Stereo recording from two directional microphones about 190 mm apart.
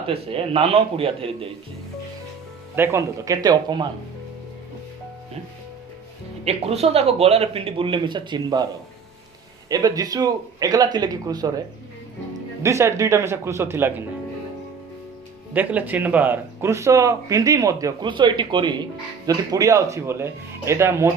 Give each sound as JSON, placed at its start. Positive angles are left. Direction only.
{"t": 0.1, "sound": "speech", "side_deg": -30}
{"t": 2.7, "sound": "speech", "side_deg": -15}
{"t": 6.4, "sound": "speech", "side_deg": -30}
{"t": 9.6, "sound": "speech", "side_deg": -20}
{"t": 12.6, "sound": "speech", "side_deg": -15}
{"t": 15.5, "sound": "speech", "side_deg": -10}